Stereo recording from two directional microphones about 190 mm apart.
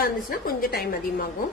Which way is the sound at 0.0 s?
50° left (ahead or behind).